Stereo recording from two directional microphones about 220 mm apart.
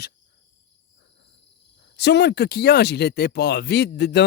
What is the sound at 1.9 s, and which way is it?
Speech, 50° left (ahead or behind).